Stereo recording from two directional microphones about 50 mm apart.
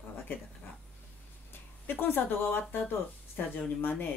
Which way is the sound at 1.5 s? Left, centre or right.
Left.